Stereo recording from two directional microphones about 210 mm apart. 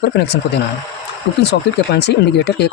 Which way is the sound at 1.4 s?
55° left (ahead or behind).